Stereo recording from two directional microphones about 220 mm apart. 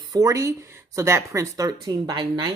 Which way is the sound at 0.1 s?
15° right (ahead or behind).